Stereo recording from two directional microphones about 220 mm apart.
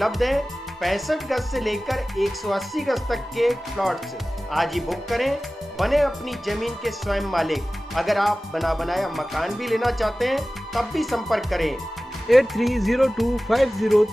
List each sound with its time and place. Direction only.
0.0 s speech: centre (ahead or behind)